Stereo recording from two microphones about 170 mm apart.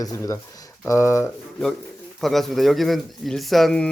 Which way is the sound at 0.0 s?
20° left (ahead or behind).